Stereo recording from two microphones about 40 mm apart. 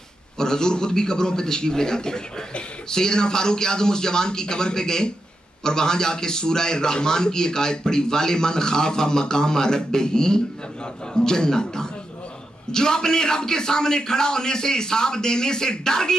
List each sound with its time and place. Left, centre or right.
0.4 s a man's voice: centre